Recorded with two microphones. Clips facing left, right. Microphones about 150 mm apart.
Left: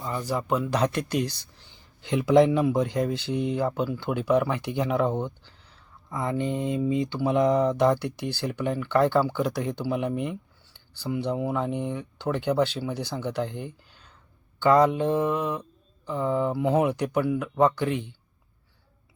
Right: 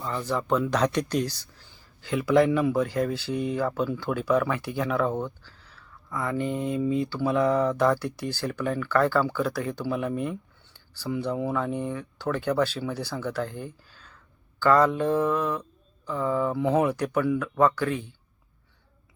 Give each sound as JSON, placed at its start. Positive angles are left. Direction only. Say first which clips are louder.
{"t": 0.0, "sound": "speech", "louder": "even", "side_deg": 10}
{"t": 2.0, "sound": "speech", "louder": "left 2 dB", "side_deg": 20}